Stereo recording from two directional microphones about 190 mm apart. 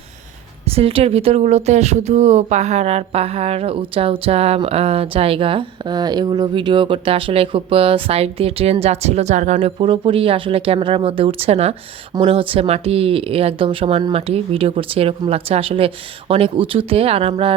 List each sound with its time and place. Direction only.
0.7 s speech: 30° right (ahead or behind)